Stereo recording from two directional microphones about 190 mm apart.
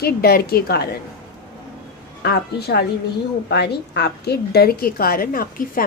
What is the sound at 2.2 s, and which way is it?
A woman's voice, 60° left (ahead or behind).